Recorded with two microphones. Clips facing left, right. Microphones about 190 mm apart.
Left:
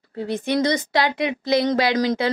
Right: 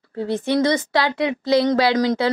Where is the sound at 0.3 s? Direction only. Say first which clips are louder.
Right 2 dB; 15° left (ahead or behind).